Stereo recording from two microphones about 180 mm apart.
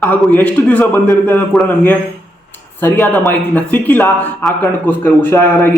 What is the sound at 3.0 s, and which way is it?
A man's voice, 10° left (ahead or behind).